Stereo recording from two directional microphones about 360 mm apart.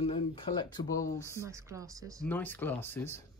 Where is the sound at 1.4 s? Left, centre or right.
Centre.